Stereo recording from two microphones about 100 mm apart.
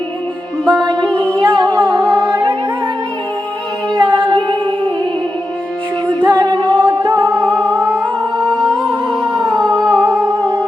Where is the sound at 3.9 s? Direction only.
55° right (ahead or behind).